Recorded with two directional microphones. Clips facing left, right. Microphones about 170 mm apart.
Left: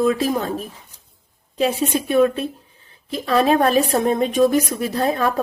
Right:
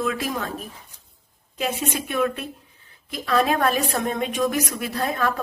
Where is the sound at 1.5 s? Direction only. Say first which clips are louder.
Left 7 dB; 30° left (ahead or behind).